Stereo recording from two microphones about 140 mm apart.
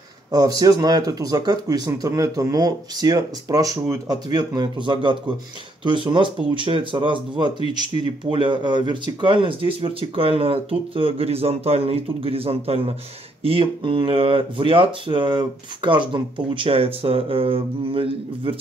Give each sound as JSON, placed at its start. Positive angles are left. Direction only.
{"t": 0.3, "sound": "speech", "side_deg": -30}